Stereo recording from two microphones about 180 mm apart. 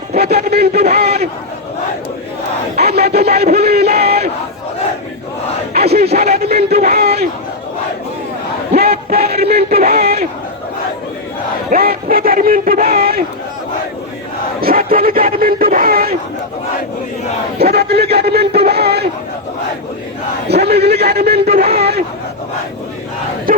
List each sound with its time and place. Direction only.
0.1 s speech: 60° right (ahead or behind)
2.8 s speech: 60° right (ahead or behind)
5.9 s speech: 60° right (ahead or behind)
8.7 s a sound: 60° right (ahead or behind)
11.7 s speech: 55° right (ahead or behind)
14.8 s a sound: 55° right (ahead or behind)
17.6 s speech: 60° right (ahead or behind)
20.5 s speech: 65° right (ahead or behind)
23.5 s battle cry: 50° right (ahead or behind)